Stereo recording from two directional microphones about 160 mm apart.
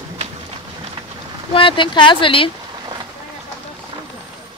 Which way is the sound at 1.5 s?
30° left (ahead or behind).